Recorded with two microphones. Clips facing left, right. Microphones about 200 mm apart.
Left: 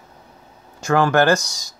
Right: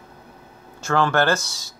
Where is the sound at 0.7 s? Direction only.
15° left (ahead or behind).